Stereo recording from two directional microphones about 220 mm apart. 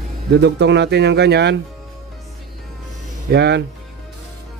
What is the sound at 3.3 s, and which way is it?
Speech, 50° right (ahead or behind).